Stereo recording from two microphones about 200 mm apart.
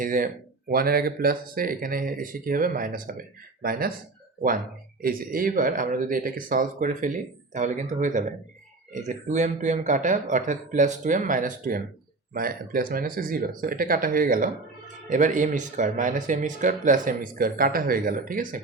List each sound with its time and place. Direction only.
0.0 s speech: 40° right (ahead or behind)
5.0 s speech: 45° right (ahead or behind)